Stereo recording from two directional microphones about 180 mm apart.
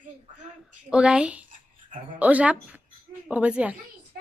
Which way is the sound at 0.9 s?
5° right (ahead or behind).